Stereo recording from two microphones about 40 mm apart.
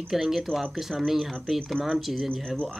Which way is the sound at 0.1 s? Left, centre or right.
Centre.